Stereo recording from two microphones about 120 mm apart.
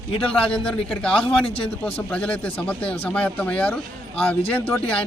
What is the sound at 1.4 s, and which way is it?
Speech, 50° left (ahead or behind).